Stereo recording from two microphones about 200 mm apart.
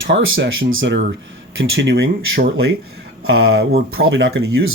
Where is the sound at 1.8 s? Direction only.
60° right (ahead or behind).